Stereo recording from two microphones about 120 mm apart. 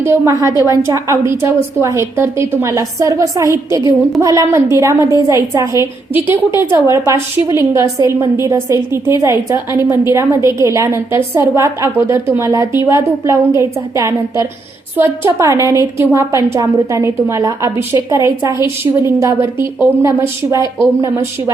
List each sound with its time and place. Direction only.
0.0 s a woman's voice: 25° right (ahead or behind)